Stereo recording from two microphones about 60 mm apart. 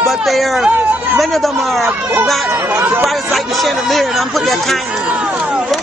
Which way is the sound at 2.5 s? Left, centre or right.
Right.